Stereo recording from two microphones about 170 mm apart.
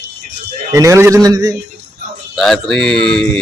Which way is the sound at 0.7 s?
20° right (ahead or behind).